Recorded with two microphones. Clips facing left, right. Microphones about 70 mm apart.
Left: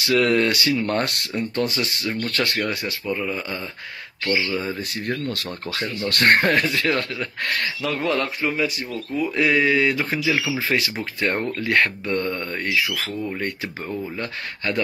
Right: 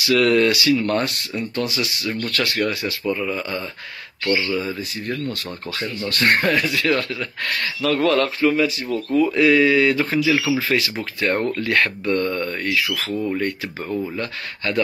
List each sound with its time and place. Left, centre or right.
0.0 s speech: left
0.9 s speech: left
2.0 s speech: left
3.1 s speech: centre
6.0 s speech: left